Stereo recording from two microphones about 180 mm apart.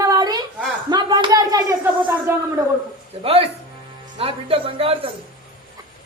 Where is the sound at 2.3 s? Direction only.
15° right (ahead or behind).